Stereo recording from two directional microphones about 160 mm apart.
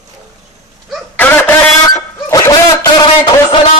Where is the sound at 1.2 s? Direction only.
15° left (ahead or behind).